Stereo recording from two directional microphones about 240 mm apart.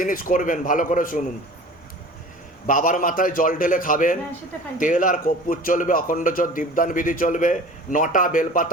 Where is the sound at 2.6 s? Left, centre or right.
Left.